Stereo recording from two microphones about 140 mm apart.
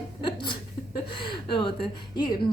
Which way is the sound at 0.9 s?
35° left (ahead or behind).